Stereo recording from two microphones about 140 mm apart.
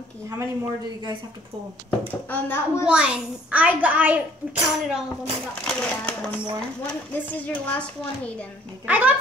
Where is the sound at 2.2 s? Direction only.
15° left (ahead or behind).